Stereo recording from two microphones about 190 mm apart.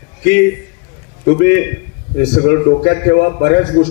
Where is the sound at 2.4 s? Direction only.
60° left (ahead or behind).